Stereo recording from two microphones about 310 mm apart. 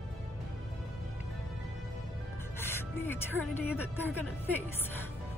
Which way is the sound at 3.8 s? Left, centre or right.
Centre.